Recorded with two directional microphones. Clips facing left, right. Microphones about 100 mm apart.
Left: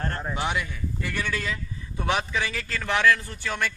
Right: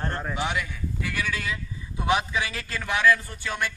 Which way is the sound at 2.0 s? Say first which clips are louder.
Right 1 dB; 15° right (ahead or behind).